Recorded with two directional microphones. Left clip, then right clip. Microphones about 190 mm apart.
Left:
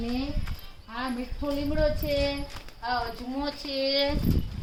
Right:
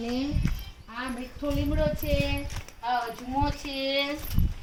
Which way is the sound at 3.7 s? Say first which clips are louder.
Left 1 dB; 20° left (ahead or behind).